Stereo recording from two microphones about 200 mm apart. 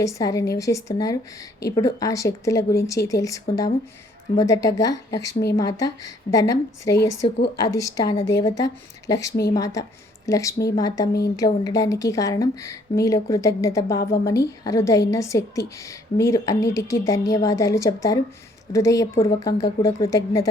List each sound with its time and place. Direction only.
0.0 s a woman's voice: 15° left (ahead or behind)